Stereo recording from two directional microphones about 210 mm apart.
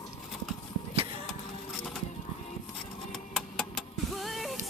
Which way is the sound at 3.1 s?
Centre (ahead or behind).